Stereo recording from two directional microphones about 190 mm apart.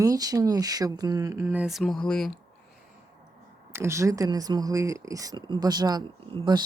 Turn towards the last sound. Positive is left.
turn(degrees=-25)  # may be behind; listen again after turning